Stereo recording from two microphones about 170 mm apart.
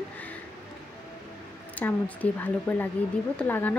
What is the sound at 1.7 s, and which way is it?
Speech, 10° left (ahead or behind).